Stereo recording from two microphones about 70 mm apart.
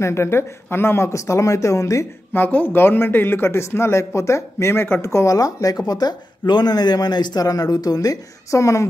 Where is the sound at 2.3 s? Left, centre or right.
Left.